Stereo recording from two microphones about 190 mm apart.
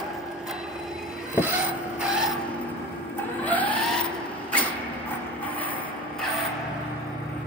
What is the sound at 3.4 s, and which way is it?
Printer, 10° left (ahead or behind).